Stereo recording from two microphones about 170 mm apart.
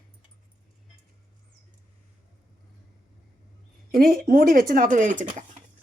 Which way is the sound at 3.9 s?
60° right (ahead or behind).